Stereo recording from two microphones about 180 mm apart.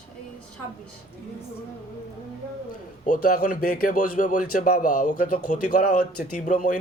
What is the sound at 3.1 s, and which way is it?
Speech, 50° left (ahead or behind).